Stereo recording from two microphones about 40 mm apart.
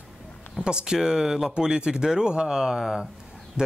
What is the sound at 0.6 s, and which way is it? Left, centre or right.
Speech, centre.